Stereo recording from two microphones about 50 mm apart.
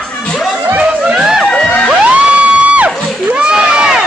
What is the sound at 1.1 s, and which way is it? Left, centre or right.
Crowd, centre.